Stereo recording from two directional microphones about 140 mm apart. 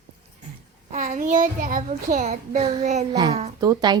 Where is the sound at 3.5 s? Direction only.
30° right (ahead or behind).